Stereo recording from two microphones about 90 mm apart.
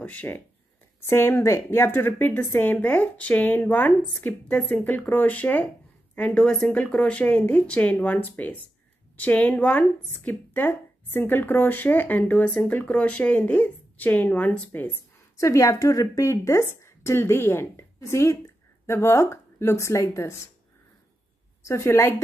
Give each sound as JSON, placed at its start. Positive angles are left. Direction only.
{"t": 0.0, "sound": "speech", "side_deg": 20}
{"t": 1.0, "sound": "speech", "side_deg": 30}
{"t": 15.3, "sound": "a woman's voice", "side_deg": 35}
{"t": 21.6, "sound": "speech", "side_deg": 30}